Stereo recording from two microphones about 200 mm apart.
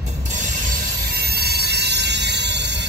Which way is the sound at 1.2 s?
50° right (ahead or behind).